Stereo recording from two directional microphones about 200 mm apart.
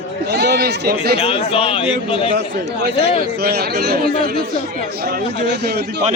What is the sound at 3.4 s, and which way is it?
Speech, 55° right (ahead or behind).